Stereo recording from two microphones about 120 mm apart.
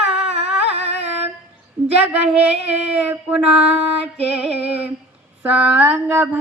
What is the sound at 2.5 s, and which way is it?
Music, 65° right (ahead or behind).